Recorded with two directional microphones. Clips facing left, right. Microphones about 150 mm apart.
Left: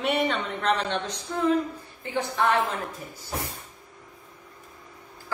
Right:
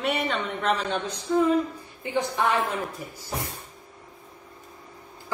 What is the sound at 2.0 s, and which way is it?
Speech, 15° right (ahead or behind).